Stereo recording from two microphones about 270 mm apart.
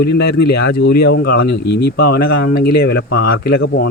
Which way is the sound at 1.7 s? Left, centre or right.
Left.